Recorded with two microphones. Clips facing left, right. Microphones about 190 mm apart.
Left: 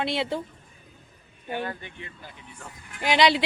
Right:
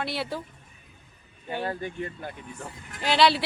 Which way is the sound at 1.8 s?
45° right (ahead or behind).